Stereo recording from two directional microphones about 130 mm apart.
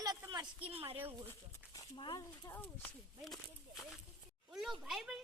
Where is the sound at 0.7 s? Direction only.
50° right (ahead or behind).